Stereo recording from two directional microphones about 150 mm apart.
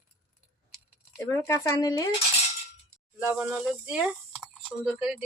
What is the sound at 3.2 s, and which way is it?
Speech, 5° right (ahead or behind).